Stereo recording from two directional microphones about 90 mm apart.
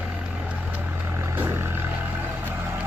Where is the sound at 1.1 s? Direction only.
25° right (ahead or behind).